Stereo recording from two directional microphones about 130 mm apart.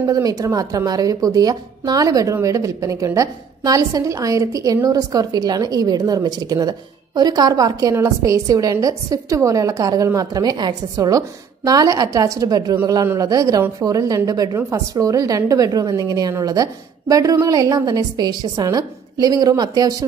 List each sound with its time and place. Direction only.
0.1 s a woman's voice: 30° right (ahead or behind)